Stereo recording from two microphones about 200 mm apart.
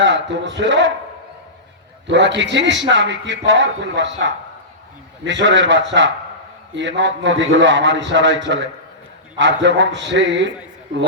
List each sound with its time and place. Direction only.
0.0 s a man's voice: 65° right (ahead or behind)
2.0 s a man's voice: 65° right (ahead or behind)